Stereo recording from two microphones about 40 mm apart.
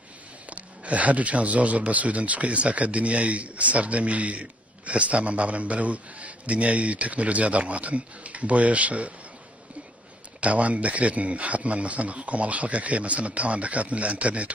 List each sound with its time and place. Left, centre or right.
0.5 s speech: right
10.4 s speech: right